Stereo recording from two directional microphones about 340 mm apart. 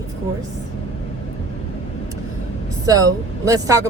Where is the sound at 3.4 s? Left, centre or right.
Centre.